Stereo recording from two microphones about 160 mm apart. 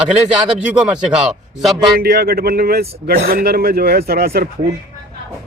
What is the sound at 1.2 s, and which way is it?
Speech, centre (ahead or behind).